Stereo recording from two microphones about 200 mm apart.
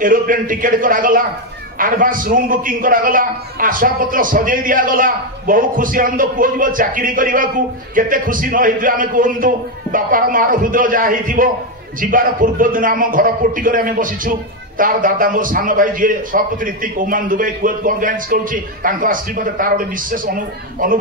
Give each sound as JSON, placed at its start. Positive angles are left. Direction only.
{"t": 0.0, "sound": "a man's voice", "side_deg": -45}